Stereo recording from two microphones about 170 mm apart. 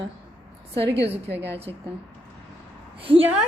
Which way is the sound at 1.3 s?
90° right.